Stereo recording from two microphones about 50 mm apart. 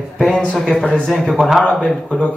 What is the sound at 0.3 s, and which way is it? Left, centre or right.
Speech, left.